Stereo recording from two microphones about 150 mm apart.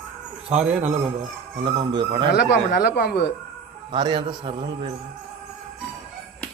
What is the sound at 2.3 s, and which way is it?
Speech, 90° left.